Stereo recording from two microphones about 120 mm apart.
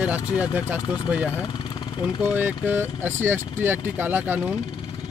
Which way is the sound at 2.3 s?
15° right (ahead or behind).